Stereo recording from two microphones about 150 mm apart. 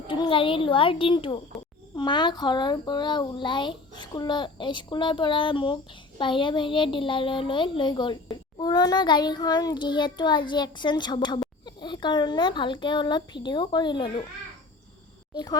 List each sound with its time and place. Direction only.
0.1 s a child's voice: 35° left (ahead or behind)